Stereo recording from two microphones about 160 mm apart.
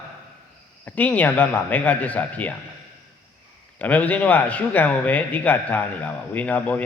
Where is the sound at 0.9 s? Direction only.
10° left (ahead or behind).